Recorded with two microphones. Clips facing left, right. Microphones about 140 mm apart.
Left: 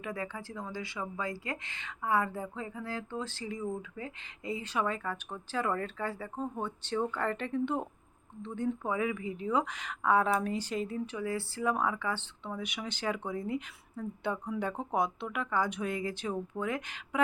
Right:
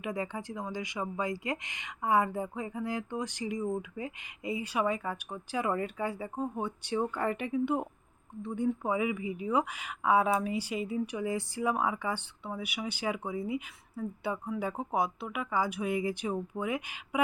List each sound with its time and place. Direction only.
0.0 s speech: 20° right (ahead or behind)